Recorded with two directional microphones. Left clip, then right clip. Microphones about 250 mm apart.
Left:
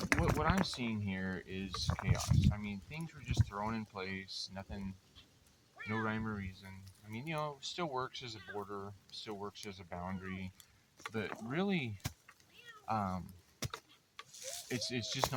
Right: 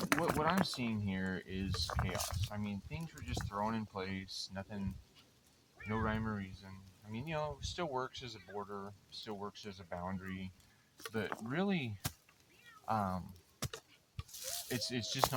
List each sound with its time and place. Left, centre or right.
0.0 s speech: centre
2.5 s speech: centre
5.9 s speech: centre
12.8 s keys jangling: centre
14.3 s speech: centre